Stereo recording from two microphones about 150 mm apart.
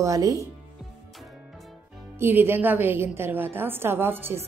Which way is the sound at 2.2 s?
15° right (ahead or behind).